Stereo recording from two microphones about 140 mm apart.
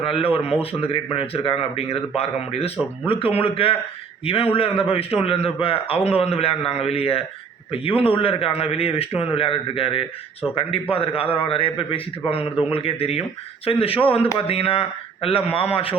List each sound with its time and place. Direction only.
0.0 s a man's voice: 40° left (ahead or behind)